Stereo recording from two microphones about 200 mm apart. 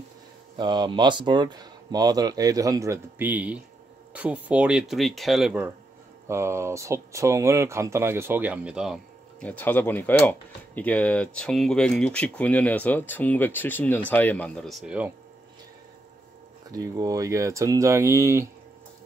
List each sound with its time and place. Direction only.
0.6 s speech: 20° right (ahead or behind); by 15.1 s 5° right (ahead or behind)
16.7 s speech: 20° right (ahead or behind)